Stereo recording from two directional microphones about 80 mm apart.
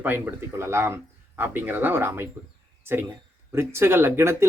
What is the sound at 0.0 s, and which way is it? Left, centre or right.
A man's voice, right.